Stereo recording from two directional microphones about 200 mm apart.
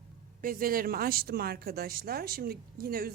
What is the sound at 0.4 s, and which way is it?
A woman's voice, 45° right (ahead or behind).